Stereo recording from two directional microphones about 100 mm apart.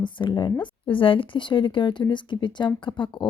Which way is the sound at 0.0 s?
50° left (ahead or behind).